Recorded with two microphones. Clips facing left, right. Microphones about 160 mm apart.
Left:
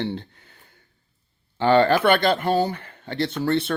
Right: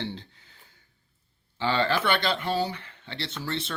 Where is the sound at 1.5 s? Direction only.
50° left (ahead or behind).